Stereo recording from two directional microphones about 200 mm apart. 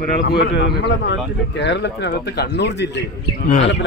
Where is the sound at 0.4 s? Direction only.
60° left (ahead or behind).